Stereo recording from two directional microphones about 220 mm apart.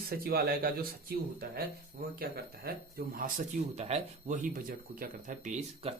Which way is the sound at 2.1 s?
45° right (ahead or behind).